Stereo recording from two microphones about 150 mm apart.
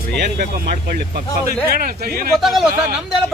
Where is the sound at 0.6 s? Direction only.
70° right (ahead or behind).